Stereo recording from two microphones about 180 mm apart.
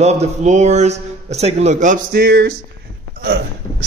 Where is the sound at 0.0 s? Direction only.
40° right (ahead or behind).